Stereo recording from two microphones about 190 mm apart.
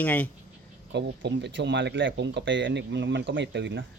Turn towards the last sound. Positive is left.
turn(degrees=-70)  # may be behind; listen again after turning